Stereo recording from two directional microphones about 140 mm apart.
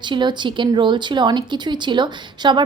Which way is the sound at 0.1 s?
35° right (ahead or behind).